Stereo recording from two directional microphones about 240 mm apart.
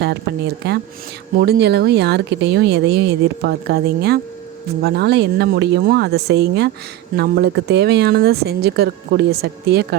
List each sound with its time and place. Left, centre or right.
0.6 s speech: right